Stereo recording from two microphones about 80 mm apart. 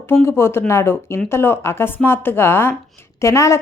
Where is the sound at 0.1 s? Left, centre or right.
Left.